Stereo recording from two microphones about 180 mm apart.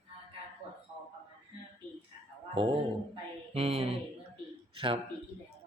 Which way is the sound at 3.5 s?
35° right (ahead or behind).